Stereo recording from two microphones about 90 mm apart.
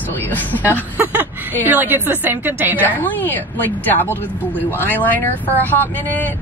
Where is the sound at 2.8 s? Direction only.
20° left (ahead or behind).